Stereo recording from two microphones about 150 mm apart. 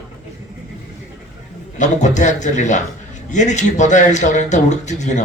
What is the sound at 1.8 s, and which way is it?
Speech, 55° left (ahead or behind).